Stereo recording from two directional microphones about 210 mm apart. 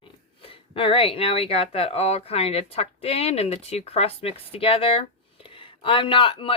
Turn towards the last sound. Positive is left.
turn(degrees=25)  # may be behind; listen again after turning